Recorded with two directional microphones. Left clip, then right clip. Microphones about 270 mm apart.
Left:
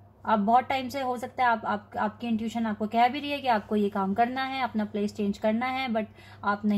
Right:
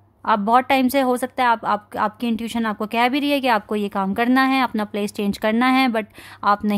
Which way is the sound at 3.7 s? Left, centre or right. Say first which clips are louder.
Right 3 dB; right.